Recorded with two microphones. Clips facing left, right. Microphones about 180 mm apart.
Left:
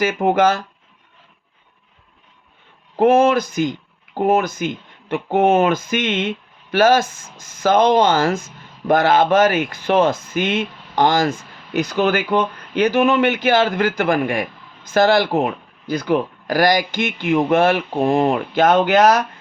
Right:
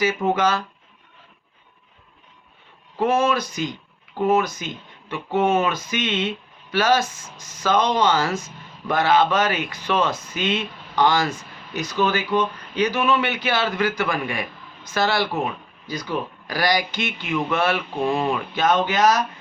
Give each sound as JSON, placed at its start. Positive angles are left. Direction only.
{"t": 0.0, "sound": "speech", "side_deg": 50}
{"t": 3.0, "sound": "speech", "side_deg": 55}